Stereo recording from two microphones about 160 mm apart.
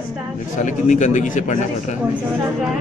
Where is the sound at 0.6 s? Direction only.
50° left (ahead or behind).